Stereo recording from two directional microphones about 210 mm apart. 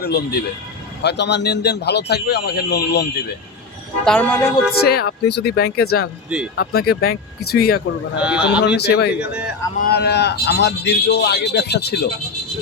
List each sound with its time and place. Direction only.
0.0 s a man's voice: 50° left (ahead or behind)
4.0 s speech: 5° left (ahead or behind)
4.8 s a man's voice: 50° left (ahead or behind)
8.2 s speech: 5° right (ahead or behind)
8.6 s a man's voice: 50° left (ahead or behind)